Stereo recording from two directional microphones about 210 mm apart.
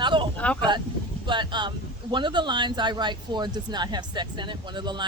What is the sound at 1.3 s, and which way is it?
A man's voice, 20° right (ahead or behind).